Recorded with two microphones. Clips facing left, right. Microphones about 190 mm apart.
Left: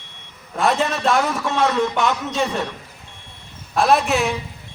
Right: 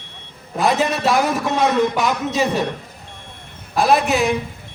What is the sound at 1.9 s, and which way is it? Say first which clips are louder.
Speech: right 1 dB; centre (ahead or behind).